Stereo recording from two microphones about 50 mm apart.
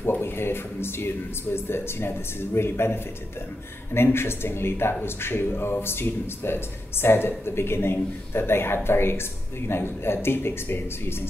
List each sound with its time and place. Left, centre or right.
0.2 s speech: left